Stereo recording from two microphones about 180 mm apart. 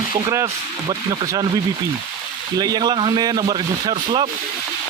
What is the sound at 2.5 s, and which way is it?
A man's voice, 20° right (ahead or behind).